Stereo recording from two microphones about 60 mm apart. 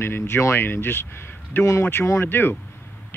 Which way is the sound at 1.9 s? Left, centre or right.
Left.